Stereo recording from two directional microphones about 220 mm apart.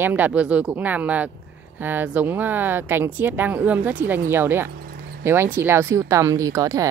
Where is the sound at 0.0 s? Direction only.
10° right (ahead or behind).